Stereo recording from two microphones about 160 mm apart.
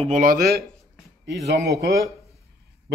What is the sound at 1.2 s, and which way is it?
Speech, 90° right.